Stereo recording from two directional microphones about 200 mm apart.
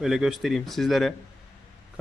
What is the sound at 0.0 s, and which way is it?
Speech, centre (ahead or behind).